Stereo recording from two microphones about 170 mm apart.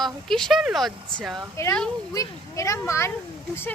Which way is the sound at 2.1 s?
20° left (ahead or behind).